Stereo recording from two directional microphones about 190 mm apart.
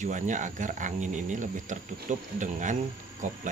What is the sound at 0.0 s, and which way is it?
Speech, 40° right (ahead or behind).